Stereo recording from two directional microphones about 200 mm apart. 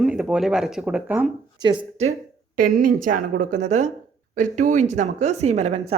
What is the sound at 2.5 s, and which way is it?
A woman's voice, 45° right (ahead or behind).